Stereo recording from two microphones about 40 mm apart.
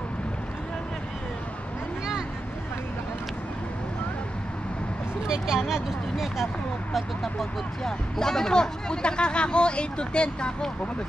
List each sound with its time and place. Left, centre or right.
5.2 s speech: centre
7.3 s speech: centre